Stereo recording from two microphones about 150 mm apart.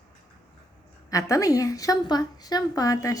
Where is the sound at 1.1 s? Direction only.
20° left (ahead or behind).